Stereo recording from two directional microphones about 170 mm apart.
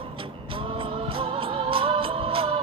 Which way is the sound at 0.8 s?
35° right (ahead or behind).